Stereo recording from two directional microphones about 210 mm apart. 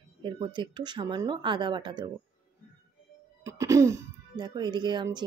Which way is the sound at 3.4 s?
15° right (ahead or behind).